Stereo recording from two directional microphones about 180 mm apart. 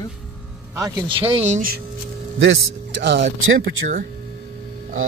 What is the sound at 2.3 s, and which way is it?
Speech, 80° right.